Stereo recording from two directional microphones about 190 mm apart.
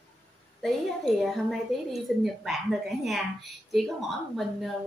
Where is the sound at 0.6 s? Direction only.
Centre (ahead or behind).